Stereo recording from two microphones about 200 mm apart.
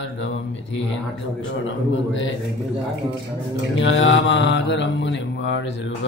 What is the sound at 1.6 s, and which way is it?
Mantra, 70° left (ahead or behind).